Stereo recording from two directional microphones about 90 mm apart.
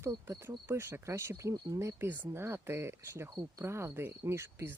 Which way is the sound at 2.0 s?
25° right (ahead or behind).